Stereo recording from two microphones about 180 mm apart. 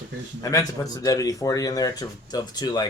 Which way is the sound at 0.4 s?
20° left (ahead or behind).